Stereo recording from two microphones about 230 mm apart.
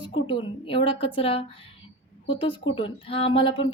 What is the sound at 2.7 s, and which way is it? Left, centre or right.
A woman's voice, left.